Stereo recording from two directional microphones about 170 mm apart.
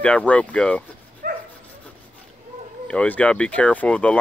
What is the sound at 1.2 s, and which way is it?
Dog, 60° right (ahead or behind).